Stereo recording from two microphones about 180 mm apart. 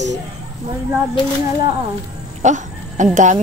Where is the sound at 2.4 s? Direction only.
45° right (ahead or behind).